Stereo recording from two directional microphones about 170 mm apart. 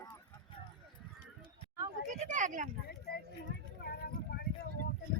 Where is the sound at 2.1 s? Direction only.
45° right (ahead or behind).